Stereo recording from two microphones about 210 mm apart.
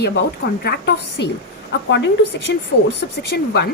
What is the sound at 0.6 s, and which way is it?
A woman's voice, 50° left (ahead or behind).